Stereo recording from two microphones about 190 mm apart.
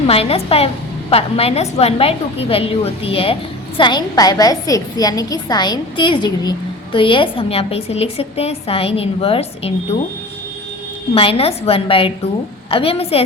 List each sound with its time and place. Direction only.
0.1 s a woman's voice: 30° left (ahead or behind)
11.1 s a woman's voice: 30° left (ahead or behind)